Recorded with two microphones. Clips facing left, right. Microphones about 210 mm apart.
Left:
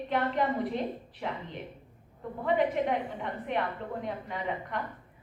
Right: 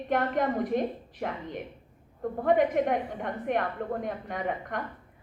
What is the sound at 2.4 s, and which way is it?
A woman's voice, 50° right (ahead or behind).